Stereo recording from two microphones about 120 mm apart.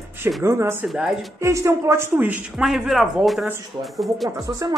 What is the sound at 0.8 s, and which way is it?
Speech, 5° right (ahead or behind).